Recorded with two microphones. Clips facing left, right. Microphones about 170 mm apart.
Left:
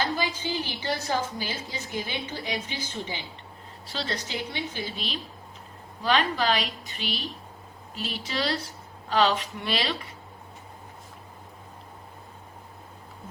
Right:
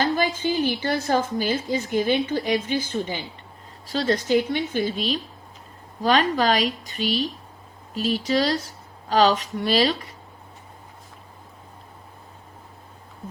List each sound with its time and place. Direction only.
0.0 s a woman's voice: 50° right (ahead or behind)